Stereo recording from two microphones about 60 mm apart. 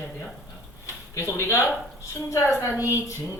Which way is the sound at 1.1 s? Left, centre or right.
Left.